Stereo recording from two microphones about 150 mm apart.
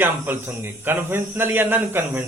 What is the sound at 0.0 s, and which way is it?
A man's voice, 15° right (ahead or behind).